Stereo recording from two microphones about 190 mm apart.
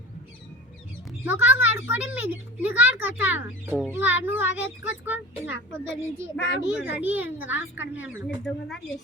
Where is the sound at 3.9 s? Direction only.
10° right (ahead or behind).